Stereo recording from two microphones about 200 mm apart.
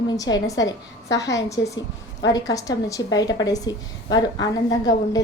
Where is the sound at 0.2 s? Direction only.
20° left (ahead or behind).